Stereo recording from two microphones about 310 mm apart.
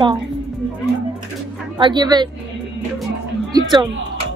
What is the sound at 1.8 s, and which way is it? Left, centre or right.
Speech, centre.